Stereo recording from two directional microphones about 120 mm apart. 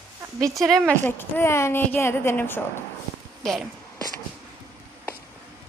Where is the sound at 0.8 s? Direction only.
15° left (ahead or behind).